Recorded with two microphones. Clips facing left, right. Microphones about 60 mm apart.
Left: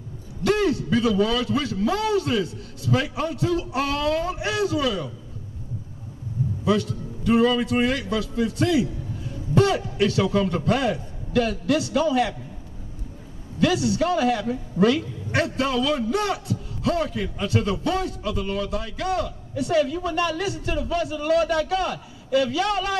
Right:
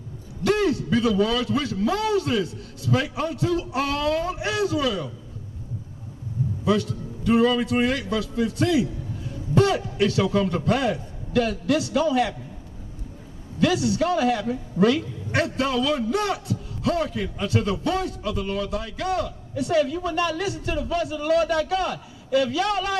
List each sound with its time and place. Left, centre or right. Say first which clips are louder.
0.4 s a man's voice: even; centre
6.6 s a man's voice: even; centre
13.9 s a man's voice: even; centre